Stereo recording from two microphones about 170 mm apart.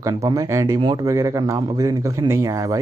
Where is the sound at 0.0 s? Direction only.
20° right (ahead or behind).